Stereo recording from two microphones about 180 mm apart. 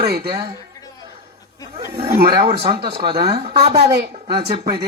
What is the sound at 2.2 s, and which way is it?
Female singing, 30° right (ahead or behind).